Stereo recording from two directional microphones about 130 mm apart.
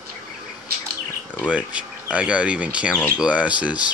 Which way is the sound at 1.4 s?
10° right (ahead or behind).